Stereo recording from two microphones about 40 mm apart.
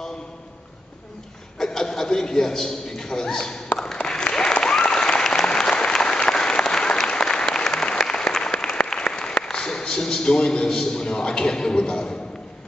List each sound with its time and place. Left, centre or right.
1.6 s a man's voice: centre
3.7 s applause: left
9.1 s a man's voice: left
11.9 s a man's voice: centre